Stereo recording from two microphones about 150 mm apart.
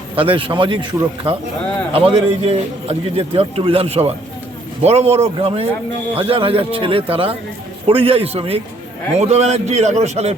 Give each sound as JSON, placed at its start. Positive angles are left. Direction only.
{"t": 0.2, "sound": "a man's voice", "side_deg": -35}